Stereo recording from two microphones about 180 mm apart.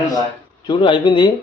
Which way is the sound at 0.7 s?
25° left (ahead or behind).